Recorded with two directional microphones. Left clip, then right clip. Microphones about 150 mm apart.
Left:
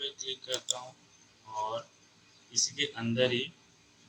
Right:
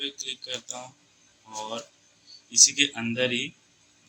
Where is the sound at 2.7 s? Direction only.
50° right (ahead or behind).